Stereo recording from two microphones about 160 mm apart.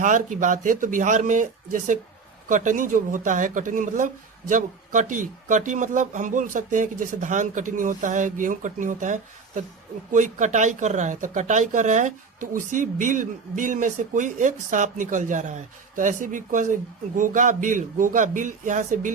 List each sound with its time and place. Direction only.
0.0 s speech: 50° right (ahead or behind)